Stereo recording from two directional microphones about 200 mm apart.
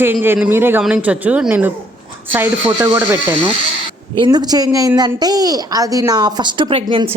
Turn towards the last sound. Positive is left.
turn(degrees=-25)  # may be behind; listen again after turning